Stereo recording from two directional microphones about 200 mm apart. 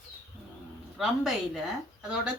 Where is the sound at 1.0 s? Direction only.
Centre (ahead or behind).